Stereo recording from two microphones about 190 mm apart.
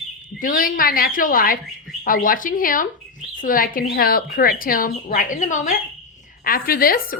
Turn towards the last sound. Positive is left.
turn(degrees=50)  # may be behind; listen again after turning